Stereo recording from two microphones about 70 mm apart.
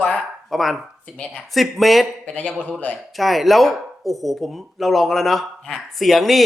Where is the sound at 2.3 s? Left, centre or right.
Centre.